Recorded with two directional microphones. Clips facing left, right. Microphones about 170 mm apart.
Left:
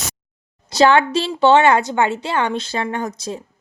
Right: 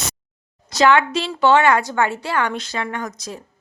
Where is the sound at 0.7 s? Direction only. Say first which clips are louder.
Left 2 dB; 30° left (ahead or behind).